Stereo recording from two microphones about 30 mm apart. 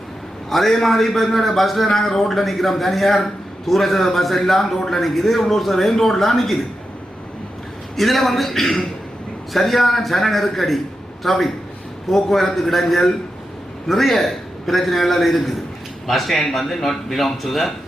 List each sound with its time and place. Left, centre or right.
0.5 s a man's voice: centre
7.9 s a man's voice: centre